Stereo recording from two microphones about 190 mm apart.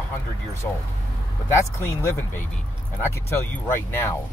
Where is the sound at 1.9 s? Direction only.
15° left (ahead or behind).